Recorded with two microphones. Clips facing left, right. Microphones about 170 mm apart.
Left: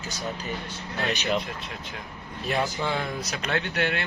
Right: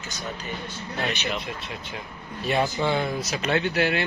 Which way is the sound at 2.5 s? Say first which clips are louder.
Right 3 dB; centre (ahead or behind).